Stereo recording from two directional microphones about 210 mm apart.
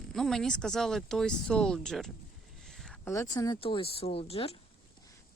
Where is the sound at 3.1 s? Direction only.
15° left (ahead or behind).